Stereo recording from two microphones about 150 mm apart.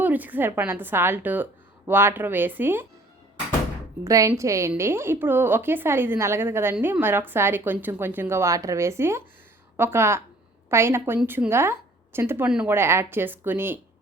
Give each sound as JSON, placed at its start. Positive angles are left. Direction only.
{"t": 0.0, "sound": "a woman's voice", "side_deg": -10}
{"t": 4.0, "sound": "a woman's voice", "side_deg": -20}